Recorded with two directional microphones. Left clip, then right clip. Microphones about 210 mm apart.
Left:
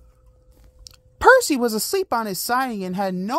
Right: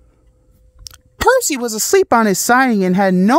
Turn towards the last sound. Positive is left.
turn(degrees=-35)  # may be behind; listen again after turning